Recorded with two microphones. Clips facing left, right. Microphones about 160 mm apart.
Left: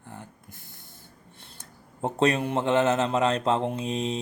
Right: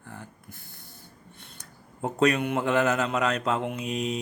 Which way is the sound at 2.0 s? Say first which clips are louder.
Even; 30° left (ahead or behind).